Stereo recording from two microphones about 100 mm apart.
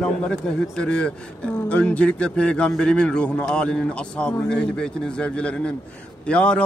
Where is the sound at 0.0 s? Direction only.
10° left (ahead or behind).